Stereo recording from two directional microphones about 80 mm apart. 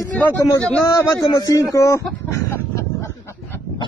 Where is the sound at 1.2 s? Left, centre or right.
Left.